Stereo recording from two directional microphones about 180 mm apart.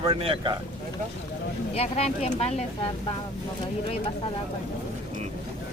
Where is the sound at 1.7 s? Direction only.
35° left (ahead or behind).